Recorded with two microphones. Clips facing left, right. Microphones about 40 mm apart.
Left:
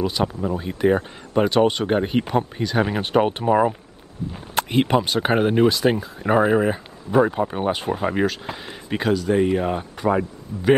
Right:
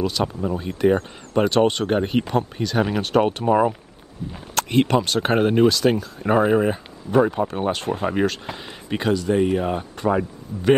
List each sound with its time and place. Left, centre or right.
0.4 s speech: centre
5.7 s speech: centre
6.2 s speech: centre